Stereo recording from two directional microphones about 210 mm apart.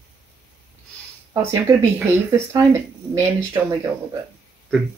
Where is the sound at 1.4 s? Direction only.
10° right (ahead or behind).